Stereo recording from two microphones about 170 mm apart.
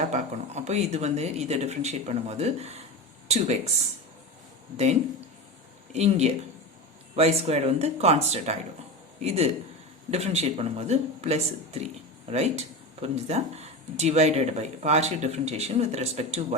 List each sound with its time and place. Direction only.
0.1 s speech: 40° right (ahead or behind)
5.9 s speech: 40° right (ahead or behind)